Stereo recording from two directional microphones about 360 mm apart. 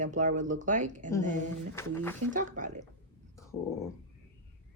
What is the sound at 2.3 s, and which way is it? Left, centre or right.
Speech, right.